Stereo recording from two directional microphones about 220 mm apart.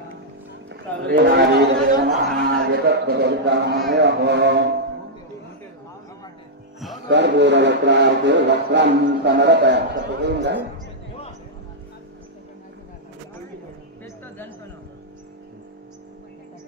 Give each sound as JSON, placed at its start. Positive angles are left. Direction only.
{"t": 1.0, "sound": "speech", "side_deg": -45}
{"t": 7.1, "sound": "speech", "side_deg": -50}